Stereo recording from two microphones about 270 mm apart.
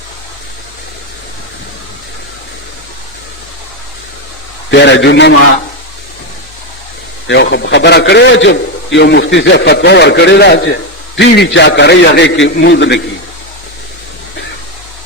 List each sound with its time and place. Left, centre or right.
4.7 s a man's voice: left
7.3 s a man's voice: left